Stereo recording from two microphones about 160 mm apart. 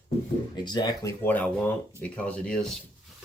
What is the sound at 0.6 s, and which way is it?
Speech, 25° left (ahead or behind).